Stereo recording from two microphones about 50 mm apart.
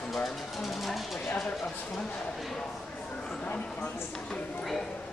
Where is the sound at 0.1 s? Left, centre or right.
Centre.